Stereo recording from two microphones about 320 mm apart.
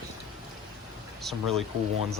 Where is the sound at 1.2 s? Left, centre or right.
Centre.